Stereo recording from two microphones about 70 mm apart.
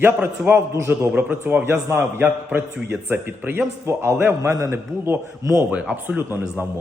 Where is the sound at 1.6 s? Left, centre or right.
Right.